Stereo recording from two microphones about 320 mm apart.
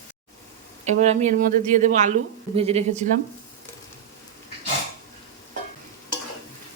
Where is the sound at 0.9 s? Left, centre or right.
Right.